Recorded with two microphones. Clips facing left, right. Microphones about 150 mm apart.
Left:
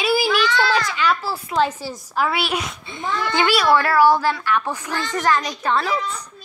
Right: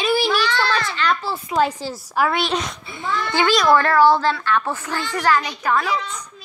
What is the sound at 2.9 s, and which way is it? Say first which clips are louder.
A child's voice: even; 20° left (ahead or behind).